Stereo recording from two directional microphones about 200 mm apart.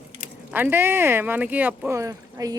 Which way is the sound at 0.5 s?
10° right (ahead or behind).